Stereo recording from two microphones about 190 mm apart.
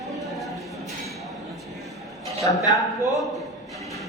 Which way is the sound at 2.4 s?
20° left (ahead or behind).